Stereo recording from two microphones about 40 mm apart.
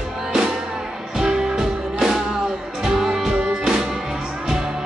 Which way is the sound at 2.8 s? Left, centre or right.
Centre.